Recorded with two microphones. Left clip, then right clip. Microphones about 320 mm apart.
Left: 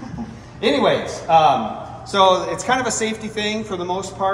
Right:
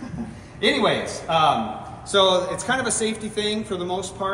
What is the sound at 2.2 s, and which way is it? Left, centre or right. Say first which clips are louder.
Speech: left 3 dB; left.